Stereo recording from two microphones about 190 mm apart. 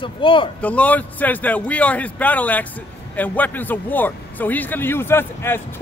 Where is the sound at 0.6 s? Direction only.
10° left (ahead or behind).